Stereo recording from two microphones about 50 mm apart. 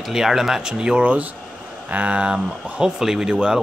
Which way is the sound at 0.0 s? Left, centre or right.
Centre.